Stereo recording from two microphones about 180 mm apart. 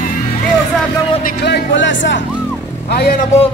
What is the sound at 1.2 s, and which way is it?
Speech, 60° left (ahead or behind).